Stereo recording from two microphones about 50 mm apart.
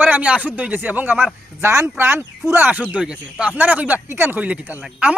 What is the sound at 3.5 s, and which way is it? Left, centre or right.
Speech, right.